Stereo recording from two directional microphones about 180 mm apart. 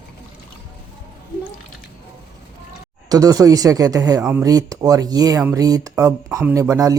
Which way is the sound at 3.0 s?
20° right (ahead or behind).